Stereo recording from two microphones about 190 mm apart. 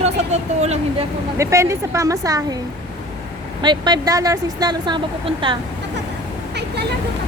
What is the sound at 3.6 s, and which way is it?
Speech, 20° right (ahead or behind).